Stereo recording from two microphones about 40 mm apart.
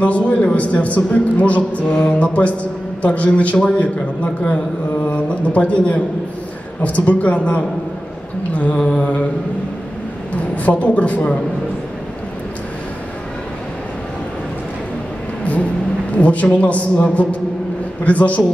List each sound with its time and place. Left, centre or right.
0.0 s a man's voice: left
8.9 s mantra: left
10.3 s a man's voice: left
16.2 s a man's voice: left